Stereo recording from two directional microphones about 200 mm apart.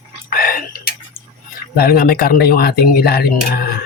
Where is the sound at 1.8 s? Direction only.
50° left (ahead or behind).